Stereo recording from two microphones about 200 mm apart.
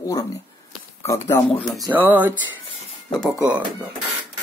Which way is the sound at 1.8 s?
10° right (ahead or behind).